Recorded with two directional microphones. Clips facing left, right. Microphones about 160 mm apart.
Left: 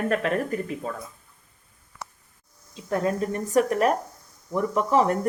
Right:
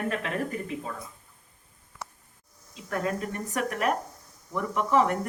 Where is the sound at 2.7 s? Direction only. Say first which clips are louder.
Left 5 dB; 30° left (ahead or behind).